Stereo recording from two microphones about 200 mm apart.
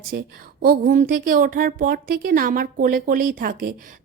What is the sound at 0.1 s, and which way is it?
A woman's voice, 50° right (ahead or behind).